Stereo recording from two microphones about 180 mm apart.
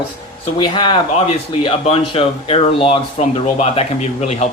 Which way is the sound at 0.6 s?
25° left (ahead or behind).